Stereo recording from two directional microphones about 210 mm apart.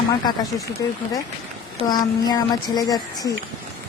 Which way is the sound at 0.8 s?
15° left (ahead or behind).